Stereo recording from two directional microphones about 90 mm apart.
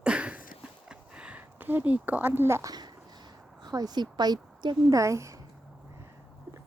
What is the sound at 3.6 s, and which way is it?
A woman's voice, 50° right (ahead or behind).